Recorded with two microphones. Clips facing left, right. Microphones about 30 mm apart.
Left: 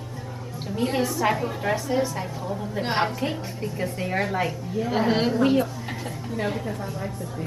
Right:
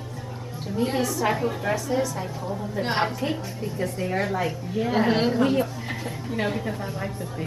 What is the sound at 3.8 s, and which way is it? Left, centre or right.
Speech, centre.